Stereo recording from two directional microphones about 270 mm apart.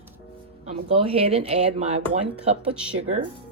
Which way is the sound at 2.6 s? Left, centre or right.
Centre.